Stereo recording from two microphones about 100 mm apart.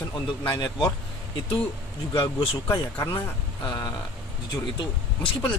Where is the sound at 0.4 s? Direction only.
45° left (ahead or behind).